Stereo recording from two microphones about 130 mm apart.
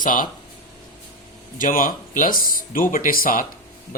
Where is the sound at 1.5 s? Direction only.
90° left.